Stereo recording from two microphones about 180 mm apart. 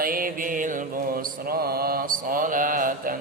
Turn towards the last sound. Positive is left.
turn(degrees=-50)  # may be behind; listen again after turning